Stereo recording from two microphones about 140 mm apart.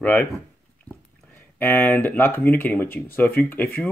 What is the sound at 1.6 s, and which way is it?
Speech, 15° left (ahead or behind).